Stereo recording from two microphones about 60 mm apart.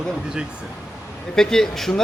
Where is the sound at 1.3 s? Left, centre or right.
Centre.